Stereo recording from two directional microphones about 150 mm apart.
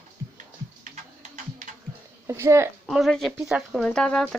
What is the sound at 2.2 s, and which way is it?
Speech, 20° right (ahead or behind).